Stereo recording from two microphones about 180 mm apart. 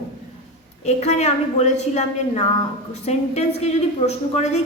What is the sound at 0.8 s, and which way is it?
A woman's voice, 35° left (ahead or behind).